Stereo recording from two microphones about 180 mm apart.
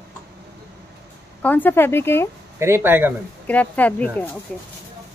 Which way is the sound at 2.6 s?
15° right (ahead or behind).